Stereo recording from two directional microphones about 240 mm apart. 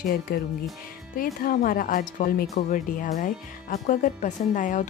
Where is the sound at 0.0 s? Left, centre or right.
Left.